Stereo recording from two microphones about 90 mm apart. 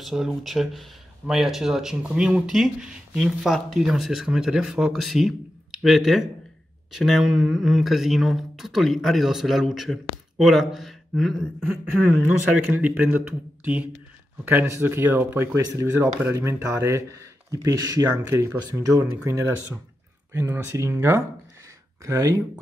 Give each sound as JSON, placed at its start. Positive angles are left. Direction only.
{"t": 0.0, "sound": "speech", "side_deg": -5}
{"t": 12.5, "sound": "a man's voice", "side_deg": -15}
{"t": 14.4, "sound": "speech", "side_deg": -25}
{"t": 20.5, "sound": "speech", "side_deg": -30}